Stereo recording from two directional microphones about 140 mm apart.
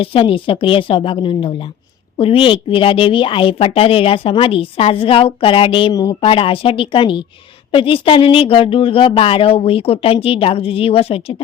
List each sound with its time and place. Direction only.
0.0 s a woman's voice: 40° left (ahead or behind)